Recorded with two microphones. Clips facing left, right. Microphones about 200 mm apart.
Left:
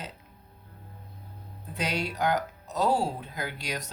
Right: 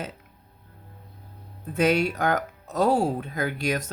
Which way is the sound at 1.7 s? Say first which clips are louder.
Right 9 dB; 50° right (ahead or behind).